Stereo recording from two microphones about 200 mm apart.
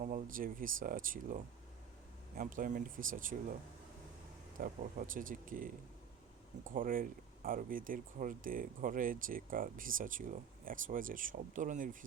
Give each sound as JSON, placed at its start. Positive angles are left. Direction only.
{"t": 0.0, "sound": "speech", "side_deg": -40}
{"t": 4.6, "sound": "speech", "side_deg": -40}